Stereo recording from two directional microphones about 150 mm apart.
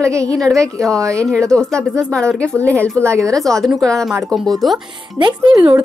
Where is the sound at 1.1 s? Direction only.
5° left (ahead or behind).